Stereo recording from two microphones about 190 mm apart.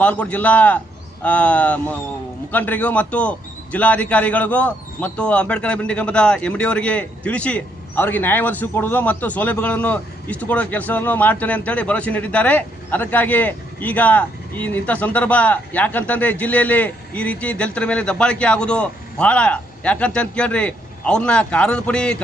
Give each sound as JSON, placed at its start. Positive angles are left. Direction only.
{"t": 0.0, "sound": "a man's voice", "side_deg": 10}